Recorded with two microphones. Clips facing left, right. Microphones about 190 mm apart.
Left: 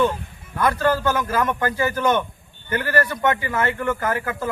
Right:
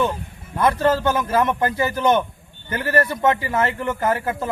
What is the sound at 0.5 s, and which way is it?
A man's voice, 25° right (ahead or behind).